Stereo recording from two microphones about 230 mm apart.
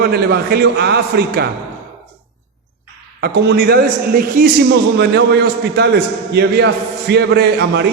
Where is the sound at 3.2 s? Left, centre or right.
Right.